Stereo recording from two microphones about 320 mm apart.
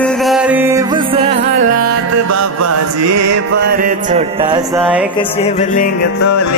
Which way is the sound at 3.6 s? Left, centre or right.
Right.